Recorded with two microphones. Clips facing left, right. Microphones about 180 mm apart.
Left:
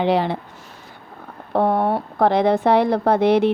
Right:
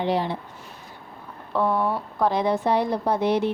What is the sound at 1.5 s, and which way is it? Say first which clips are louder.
A woman's voice: left 5 dB; 55° left (ahead or behind).